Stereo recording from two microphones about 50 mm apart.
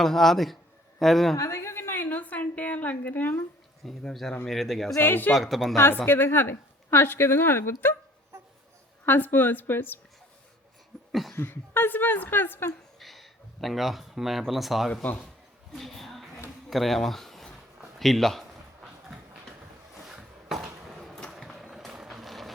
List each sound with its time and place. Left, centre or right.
0.0 s a woman's voice: centre
1.4 s a sound: left
4.1 s speech: centre
4.9 s speech: left
5.3 s speech: centre
6.1 s speech: left
9.0 s speech: left
11.1 s a sound: centre
11.3 s speech: left
13.0 s speech: centre
18.0 s a sound: centre
19.9 s a sound: centre
21.3 s vehicle: centre